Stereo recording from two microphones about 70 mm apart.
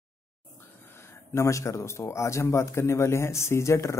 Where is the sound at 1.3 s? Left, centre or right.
Left.